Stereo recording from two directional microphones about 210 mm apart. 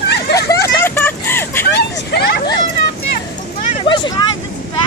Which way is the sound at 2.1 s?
50° left (ahead or behind).